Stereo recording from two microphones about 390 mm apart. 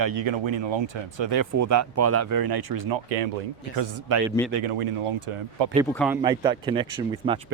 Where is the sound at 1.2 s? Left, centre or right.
Right.